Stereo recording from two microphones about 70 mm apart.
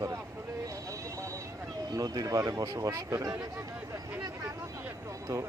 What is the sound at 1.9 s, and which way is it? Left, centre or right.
Speech, right.